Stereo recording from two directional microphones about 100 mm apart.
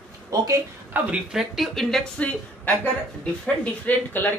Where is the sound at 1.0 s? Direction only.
20° right (ahead or behind).